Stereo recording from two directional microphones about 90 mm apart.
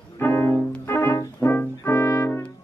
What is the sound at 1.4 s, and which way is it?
Brass instrument, 30° left (ahead or behind).